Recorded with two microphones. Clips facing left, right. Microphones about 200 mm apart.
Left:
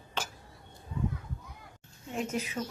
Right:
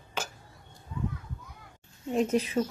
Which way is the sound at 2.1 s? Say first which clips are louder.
Right 8 dB; 35° right (ahead or behind).